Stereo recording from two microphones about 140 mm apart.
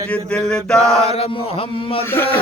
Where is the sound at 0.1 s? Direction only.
5° left (ahead or behind).